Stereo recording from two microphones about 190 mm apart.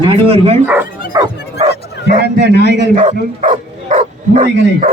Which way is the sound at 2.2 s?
60° right (ahead or behind).